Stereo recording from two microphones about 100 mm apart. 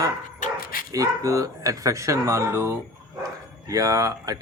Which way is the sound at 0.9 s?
35° right (ahead or behind).